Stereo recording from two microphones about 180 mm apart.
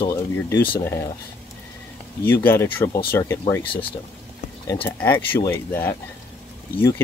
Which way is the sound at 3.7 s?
30° left (ahead or behind).